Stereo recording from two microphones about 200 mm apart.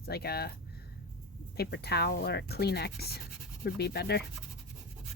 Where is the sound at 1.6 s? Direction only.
55° left (ahead or behind).